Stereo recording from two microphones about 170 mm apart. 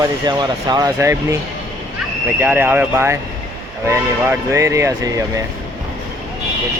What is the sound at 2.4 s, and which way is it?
Speech, 10° right (ahead or behind).